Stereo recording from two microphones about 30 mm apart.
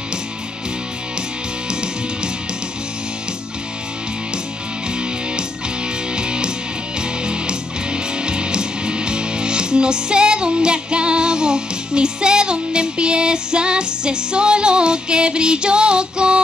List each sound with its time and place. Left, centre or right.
1.7 s music: right
4.8 s music: right